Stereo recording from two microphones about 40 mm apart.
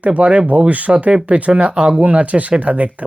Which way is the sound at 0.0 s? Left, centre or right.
Right.